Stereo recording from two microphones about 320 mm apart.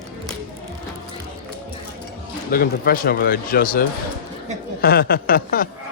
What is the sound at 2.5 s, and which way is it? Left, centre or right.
Speech, left.